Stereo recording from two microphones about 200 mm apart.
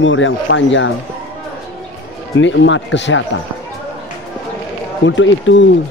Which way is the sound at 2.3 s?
70° left (ahead or behind).